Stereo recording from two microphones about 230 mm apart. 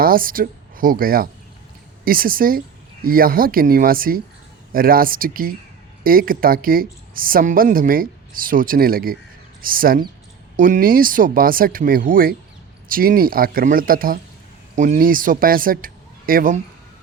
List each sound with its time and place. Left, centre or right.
0.0 s a woman's voice: right